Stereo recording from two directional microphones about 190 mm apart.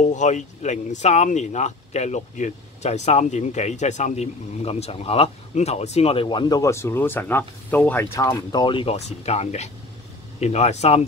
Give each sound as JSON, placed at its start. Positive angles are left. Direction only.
{"t": 0.0, "sound": "speech", "side_deg": 40}